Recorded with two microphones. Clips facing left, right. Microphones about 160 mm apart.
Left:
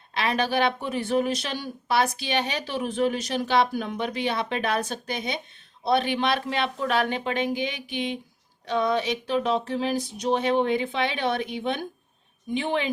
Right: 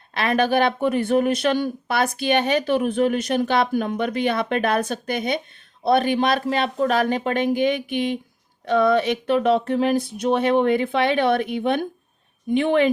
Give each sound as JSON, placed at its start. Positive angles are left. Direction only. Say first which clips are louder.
{"t": 0.1, "sound": "speech", "louder": "right 5 dB", "side_deg": -55}